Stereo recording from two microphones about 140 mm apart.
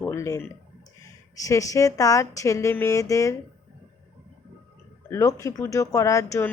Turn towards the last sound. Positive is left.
turn(degrees=20)  # may be behind; listen again after turning